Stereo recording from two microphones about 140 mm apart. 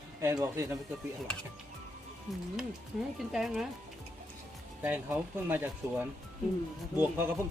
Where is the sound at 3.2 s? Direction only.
5° right (ahead or behind).